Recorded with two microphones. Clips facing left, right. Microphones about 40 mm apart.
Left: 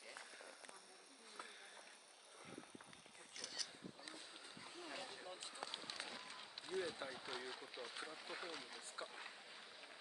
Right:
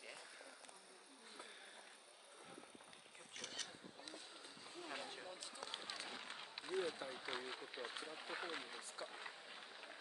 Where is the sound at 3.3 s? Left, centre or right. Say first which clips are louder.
Right 1 dB; right.